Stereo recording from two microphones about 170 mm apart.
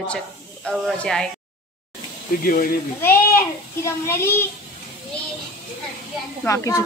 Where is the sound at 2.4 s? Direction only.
55° left (ahead or behind).